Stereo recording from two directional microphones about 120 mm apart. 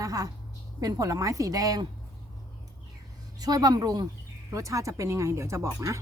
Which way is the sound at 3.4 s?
30° right (ahead or behind).